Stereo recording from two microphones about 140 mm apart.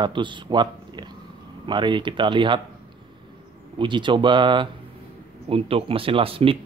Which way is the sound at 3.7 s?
35° right (ahead or behind).